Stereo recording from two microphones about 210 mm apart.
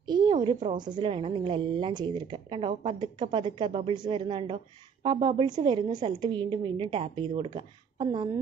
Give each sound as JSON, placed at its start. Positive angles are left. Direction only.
{"t": 0.0, "sound": "a woman's voice", "side_deg": -20}